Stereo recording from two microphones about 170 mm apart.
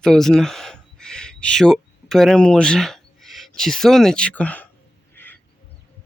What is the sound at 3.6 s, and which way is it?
Speech, centre (ahead or behind).